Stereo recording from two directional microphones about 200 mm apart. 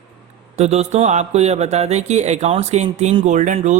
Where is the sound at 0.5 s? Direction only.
35° right (ahead or behind).